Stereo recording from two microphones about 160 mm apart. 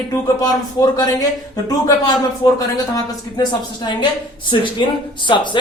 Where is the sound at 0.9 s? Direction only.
25° left (ahead or behind).